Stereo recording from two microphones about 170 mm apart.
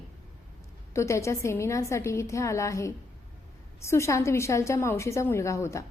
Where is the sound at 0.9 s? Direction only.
15° left (ahead or behind).